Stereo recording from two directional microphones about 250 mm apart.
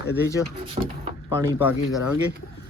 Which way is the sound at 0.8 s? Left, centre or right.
Right.